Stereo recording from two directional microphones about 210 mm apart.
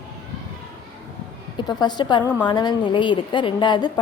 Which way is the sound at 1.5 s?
20° left (ahead or behind).